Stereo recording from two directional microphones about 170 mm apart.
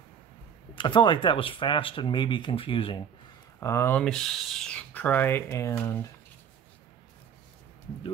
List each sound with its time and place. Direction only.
0.7 s speech: 30° left (ahead or behind)
3.5 s speech: 15° left (ahead or behind)
4.0 s speech: 5° left (ahead or behind)